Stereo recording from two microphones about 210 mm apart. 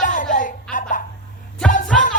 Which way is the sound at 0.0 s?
40° left (ahead or behind).